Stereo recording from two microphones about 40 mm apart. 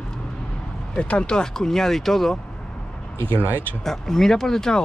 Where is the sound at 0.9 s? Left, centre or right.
Left.